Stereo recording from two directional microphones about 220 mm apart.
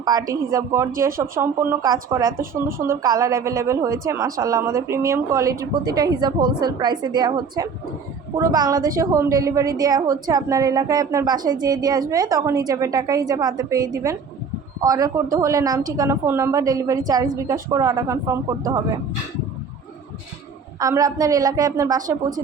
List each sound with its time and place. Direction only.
0.0 s a woman's voice: 15° right (ahead or behind)
20.7 s a woman's voice: 15° right (ahead or behind)